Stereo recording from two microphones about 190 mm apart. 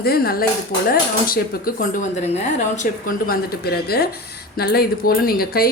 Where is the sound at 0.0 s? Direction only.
55° left (ahead or behind).